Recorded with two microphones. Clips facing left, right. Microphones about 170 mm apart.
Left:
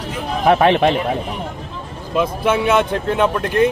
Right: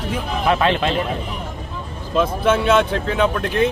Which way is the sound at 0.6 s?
65° left (ahead or behind).